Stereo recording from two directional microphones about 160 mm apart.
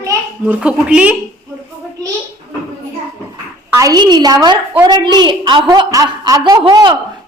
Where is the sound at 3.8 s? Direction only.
25° right (ahead or behind).